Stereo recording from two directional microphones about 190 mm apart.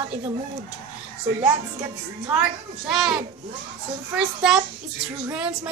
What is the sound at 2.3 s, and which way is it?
A child's voice, centre (ahead or behind).